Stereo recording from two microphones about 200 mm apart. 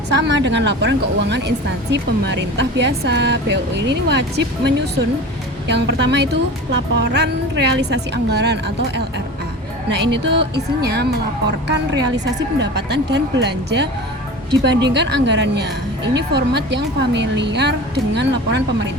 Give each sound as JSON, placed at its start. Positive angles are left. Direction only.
{"t": 0.1, "sound": "a woman's voice", "side_deg": -65}